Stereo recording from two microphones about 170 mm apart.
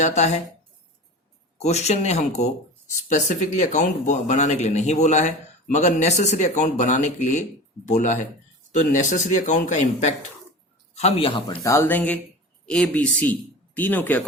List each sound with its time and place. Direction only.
0.0 s speech: 40° left (ahead or behind)
1.5 s speech: 40° left (ahead or behind)
11.6 s speech: 15° left (ahead or behind)